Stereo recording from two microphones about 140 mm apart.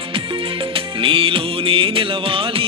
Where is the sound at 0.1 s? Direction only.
40° right (ahead or behind).